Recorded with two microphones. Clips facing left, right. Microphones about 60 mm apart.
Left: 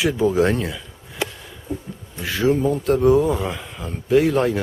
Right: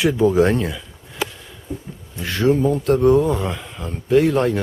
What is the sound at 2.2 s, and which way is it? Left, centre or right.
Speech, centre.